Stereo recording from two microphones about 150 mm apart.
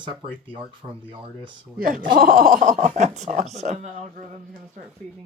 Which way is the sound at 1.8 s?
65° right (ahead or behind).